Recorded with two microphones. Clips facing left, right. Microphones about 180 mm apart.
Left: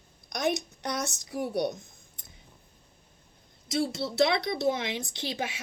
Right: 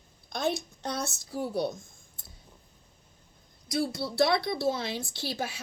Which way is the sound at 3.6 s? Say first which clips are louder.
Left 1 dB; 25° left (ahead or behind).